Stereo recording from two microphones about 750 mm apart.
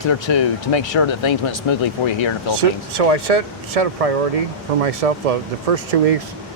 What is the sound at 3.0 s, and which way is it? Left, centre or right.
Speech, right.